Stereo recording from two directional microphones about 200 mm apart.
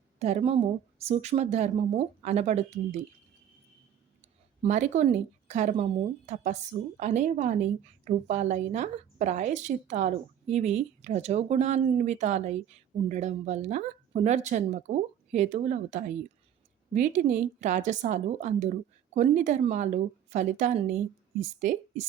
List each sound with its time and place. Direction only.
0.2 s a woman's voice: 30° right (ahead or behind)
4.6 s a woman's voice: 35° right (ahead or behind)